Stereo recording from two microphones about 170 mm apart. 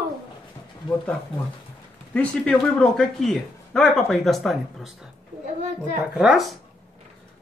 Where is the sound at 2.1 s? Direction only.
5° left (ahead or behind).